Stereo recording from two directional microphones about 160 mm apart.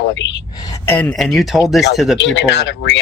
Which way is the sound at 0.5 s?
25° left (ahead or behind).